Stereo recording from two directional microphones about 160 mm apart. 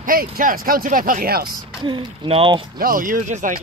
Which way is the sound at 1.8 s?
30° right (ahead or behind).